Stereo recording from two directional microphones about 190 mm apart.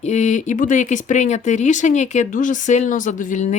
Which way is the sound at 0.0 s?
35° left (ahead or behind).